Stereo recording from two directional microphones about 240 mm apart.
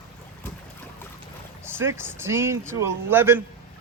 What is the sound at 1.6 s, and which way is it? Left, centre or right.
Speech, centre.